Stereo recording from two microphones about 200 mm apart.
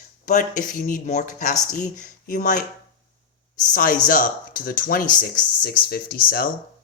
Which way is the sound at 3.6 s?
45° left (ahead or behind).